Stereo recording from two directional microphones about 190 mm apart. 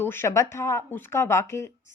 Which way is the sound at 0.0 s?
10° left (ahead or behind).